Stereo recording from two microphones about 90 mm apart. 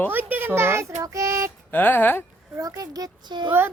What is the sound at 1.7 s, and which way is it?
Speech, 20° left (ahead or behind).